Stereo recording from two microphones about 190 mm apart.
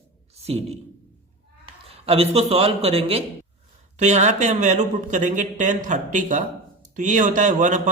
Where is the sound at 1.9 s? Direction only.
30° right (ahead or behind).